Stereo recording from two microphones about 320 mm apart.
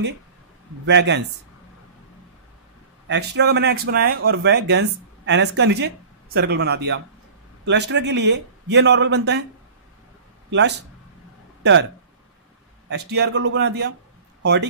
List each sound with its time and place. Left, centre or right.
0.8 s speech: right
3.1 s speech: right
10.5 s speech: right
12.9 s speech: right